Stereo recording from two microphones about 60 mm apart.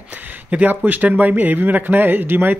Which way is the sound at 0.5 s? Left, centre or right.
Right.